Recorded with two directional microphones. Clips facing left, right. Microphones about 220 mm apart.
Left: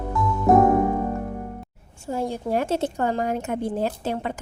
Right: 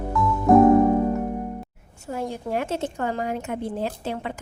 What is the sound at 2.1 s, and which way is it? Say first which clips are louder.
A woman's voice: left 3 dB; 30° left (ahead or behind).